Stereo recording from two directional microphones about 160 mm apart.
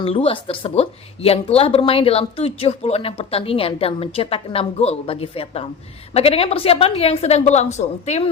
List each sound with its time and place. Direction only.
0.0 s a woman's voice: 35° left (ahead or behind)